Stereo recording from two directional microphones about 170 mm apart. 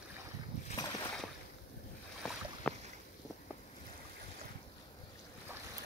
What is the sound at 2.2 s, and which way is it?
Boat, 5° left (ahead or behind).